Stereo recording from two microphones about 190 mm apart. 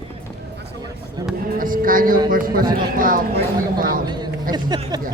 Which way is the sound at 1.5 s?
45° right (ahead or behind).